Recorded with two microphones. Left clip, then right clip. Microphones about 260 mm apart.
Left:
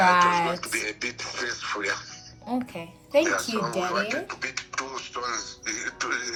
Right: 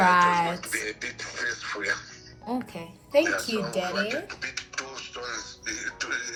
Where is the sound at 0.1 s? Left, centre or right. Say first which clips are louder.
Left 1 dB; centre.